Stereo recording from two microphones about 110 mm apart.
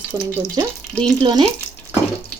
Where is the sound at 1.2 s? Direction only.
45° right (ahead or behind).